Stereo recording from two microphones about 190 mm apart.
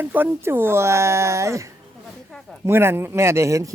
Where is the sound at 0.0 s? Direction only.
10° right (ahead or behind).